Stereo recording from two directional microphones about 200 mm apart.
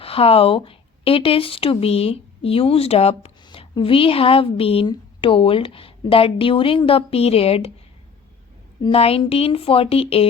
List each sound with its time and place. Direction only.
0.0 s speech: 30° left (ahead or behind)
8.8 s speech: 30° left (ahead or behind)